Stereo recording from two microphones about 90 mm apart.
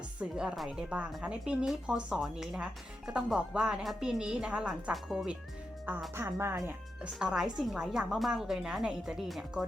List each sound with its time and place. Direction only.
0.2 s a woman's voice: 10° right (ahead or behind)
5.9 s speech: 20° right (ahead or behind)
7.2 s a woman's voice: 5° right (ahead or behind)